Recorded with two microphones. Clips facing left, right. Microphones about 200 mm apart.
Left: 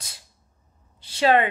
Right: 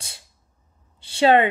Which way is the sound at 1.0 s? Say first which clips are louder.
Right 3 dB; 30° right (ahead or behind).